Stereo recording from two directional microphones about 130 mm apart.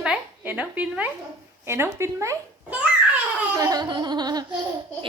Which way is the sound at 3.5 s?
30° right (ahead or behind).